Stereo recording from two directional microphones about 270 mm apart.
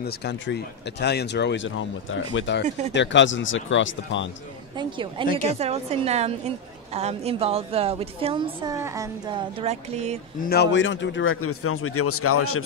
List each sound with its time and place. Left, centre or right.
0.0 s a man's voice: left
4.7 s a woman's voice: centre
5.3 s a woman's voice: left
5.6 s a woman's voice: right
10.4 s a man's voice: left